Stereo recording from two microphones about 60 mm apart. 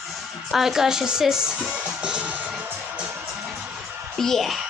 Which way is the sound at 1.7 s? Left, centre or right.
Centre.